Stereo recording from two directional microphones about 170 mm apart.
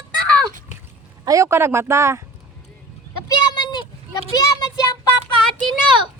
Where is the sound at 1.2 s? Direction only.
20° right (ahead or behind).